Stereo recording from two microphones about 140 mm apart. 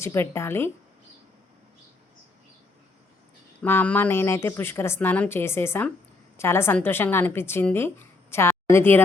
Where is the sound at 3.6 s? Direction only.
15° left (ahead or behind).